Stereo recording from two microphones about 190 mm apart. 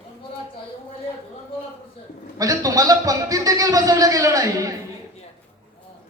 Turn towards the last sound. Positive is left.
turn(degrees=-15)  # may be behind; listen again after turning